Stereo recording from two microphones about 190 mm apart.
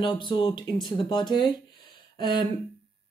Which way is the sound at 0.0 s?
25° left (ahead or behind).